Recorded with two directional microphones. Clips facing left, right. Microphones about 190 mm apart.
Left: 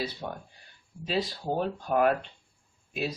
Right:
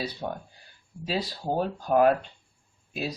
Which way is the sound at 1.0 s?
40° right (ahead or behind).